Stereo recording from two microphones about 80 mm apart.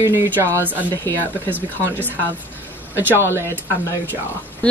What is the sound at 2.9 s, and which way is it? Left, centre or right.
Speech, right.